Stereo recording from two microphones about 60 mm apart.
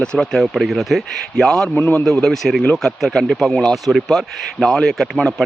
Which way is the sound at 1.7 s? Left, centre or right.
Left.